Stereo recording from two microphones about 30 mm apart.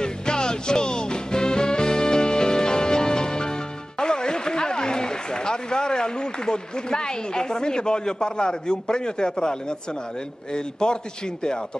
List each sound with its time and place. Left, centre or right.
0.0 s music: left
4.0 s a sound: left
10.5 s a man's voice: left